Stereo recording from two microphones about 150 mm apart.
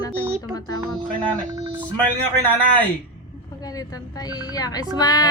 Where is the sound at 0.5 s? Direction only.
25° left (ahead or behind).